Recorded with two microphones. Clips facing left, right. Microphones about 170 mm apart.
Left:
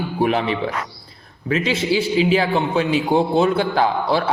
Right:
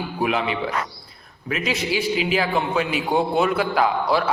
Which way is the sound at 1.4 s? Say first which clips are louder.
Left 5 dB; 30° left (ahead or behind).